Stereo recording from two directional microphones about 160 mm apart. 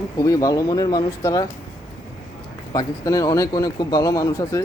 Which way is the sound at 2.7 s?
25° left (ahead or behind).